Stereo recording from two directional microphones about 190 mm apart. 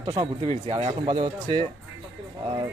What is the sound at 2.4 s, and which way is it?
Speech, 20° right (ahead or behind).